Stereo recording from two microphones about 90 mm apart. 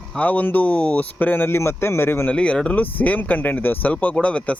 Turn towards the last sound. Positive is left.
turn(degrees=15)  # may be behind; listen again after turning